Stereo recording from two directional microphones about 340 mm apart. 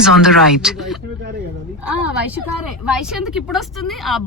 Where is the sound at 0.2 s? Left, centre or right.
Centre.